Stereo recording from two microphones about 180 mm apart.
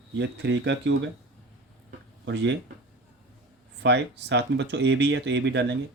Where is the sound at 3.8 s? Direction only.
75° right (ahead or behind).